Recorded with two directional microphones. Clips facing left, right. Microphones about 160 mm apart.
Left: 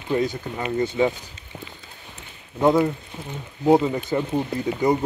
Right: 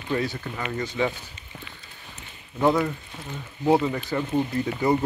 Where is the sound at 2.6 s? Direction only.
15° left (ahead or behind).